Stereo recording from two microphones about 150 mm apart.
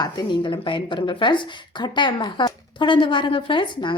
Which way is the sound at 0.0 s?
30° left (ahead or behind).